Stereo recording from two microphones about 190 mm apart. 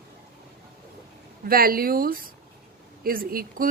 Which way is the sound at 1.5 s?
50° right (ahead or behind).